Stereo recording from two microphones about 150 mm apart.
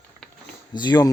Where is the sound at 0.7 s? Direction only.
30° left (ahead or behind).